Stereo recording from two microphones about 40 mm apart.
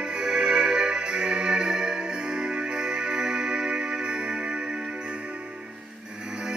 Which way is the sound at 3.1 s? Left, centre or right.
Centre.